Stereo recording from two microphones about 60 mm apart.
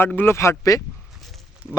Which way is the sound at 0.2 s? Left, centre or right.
Left.